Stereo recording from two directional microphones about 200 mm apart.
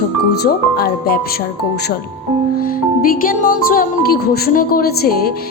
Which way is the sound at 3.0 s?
45° left (ahead or behind).